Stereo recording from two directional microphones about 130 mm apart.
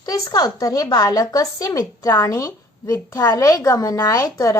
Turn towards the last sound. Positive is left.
turn(degrees=25)  # may be behind; listen again after turning